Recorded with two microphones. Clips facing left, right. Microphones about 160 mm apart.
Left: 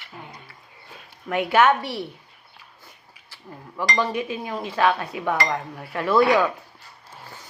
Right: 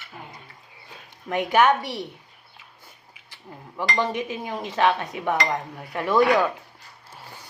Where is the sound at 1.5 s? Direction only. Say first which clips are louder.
Left 1 dB; 15° right (ahead or behind).